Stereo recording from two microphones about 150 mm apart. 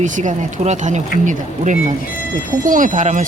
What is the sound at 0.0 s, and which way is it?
Speech, 55° right (ahead or behind).